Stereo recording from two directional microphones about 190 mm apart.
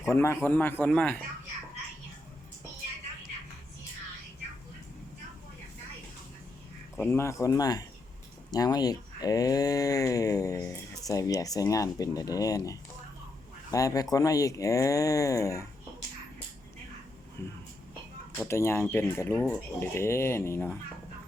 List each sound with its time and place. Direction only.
0.0 s speech: 15° left (ahead or behind)
7.0 s speech: 15° left (ahead or behind)
17.4 s speech: 10° left (ahead or behind)